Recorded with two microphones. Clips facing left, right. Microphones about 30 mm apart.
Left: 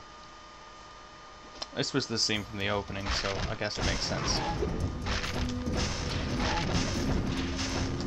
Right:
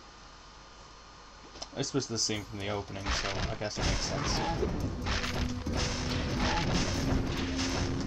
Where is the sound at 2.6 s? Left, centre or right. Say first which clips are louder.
Left 4 dB; left.